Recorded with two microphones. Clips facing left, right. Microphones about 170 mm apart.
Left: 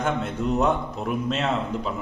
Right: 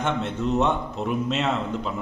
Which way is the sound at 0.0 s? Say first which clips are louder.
Even; 5° left (ahead or behind).